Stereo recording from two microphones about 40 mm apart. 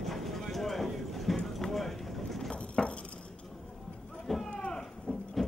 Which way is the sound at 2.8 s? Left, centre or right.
Centre.